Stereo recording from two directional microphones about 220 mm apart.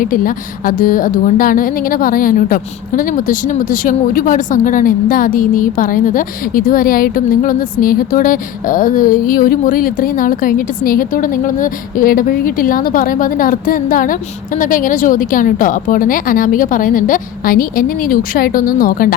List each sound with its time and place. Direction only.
0.0 s a woman's voice: 40° left (ahead or behind)